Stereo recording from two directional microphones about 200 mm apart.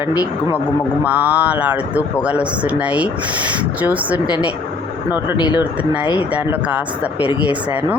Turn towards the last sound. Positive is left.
turn(degrees=-5)  # may be behind; listen again after turning